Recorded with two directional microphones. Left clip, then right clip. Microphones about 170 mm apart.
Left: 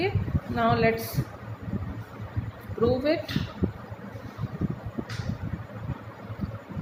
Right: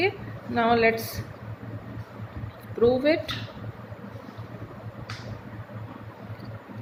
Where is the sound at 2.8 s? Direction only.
35° right (ahead or behind).